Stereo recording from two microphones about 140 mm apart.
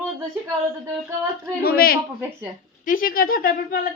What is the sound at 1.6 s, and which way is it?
Speech, 90° left.